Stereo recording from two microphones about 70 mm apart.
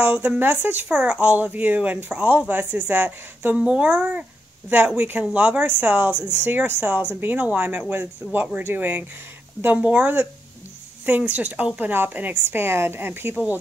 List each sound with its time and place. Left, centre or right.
0.0 s speech: right
0.8 s speech: centre
3.5 s a woman's voice: centre